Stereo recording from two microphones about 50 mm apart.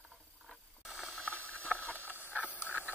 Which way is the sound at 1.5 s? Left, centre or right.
Left.